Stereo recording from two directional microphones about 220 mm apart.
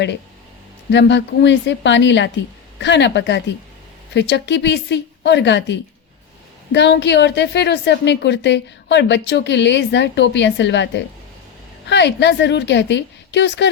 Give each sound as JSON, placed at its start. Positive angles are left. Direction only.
{"t": 0.9, "sound": "a woman's voice", "side_deg": 55}